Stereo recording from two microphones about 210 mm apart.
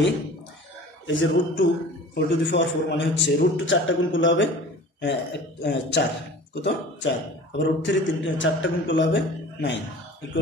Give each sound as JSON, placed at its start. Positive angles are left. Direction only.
{"t": 1.0, "sound": "a man's voice", "side_deg": 60}